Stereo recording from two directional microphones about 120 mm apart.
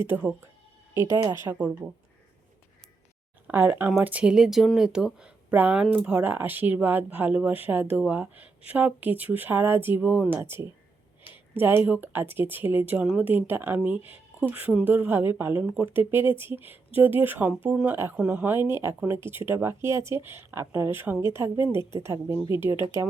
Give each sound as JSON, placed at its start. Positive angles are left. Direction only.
{"t": 0.1, "sound": "speech", "side_deg": -15}
{"t": 1.1, "sound": "speech", "side_deg": -30}
{"t": 1.5, "sound": "speech", "side_deg": -10}
{"t": 3.4, "sound": "speech", "side_deg": -15}